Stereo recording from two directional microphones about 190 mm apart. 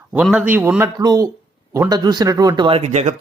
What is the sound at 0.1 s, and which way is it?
A man's voice, 5° right (ahead or behind).